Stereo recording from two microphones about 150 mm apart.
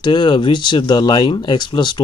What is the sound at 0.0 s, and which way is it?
Speech, 30° left (ahead or behind).